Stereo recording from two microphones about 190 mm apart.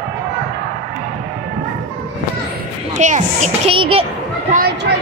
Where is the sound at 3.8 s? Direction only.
30° right (ahead or behind).